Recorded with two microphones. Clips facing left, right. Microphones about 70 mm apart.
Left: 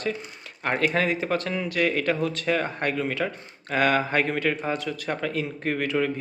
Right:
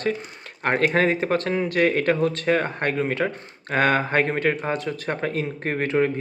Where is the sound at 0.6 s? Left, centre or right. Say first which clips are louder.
Right 4 dB; right.